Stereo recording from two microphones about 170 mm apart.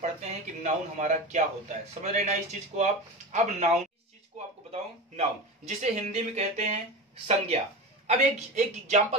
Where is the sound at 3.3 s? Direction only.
45° right (ahead or behind).